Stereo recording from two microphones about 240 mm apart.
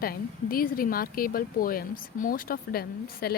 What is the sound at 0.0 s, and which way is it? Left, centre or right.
Speech, left.